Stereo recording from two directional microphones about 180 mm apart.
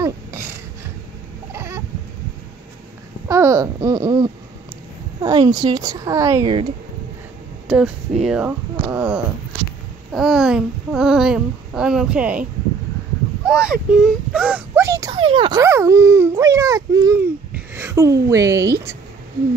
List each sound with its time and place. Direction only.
0.0 s a sound: 15° right (ahead or behind)
1.5 s chicken: 15° right (ahead or behind)
3.3 s a sound: 15° right (ahead or behind)
5.2 s a child's voice: 20° right (ahead or behind)
7.6 s a child's voice: 5° right (ahead or behind)
13.5 s a child's voice: 5° right (ahead or behind)
15.1 s a child's voice: 30° right (ahead or behind)
15.6 s speech: 15° right (ahead or behind)